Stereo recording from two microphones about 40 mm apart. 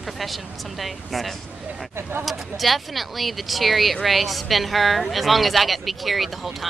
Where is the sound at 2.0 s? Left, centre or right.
Right.